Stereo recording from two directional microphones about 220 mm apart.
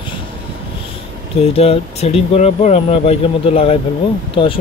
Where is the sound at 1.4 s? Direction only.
25° left (ahead or behind).